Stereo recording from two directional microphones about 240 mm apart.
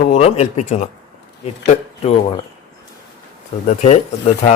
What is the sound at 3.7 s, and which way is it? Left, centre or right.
Speech, left.